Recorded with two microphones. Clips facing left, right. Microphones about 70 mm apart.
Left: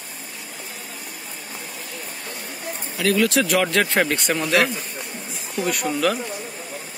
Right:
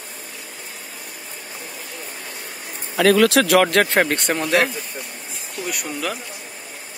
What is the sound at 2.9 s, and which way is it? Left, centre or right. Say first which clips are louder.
Speech: right 5 dB; right.